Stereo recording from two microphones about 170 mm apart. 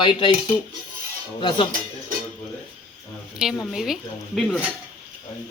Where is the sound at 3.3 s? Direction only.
5° right (ahead or behind).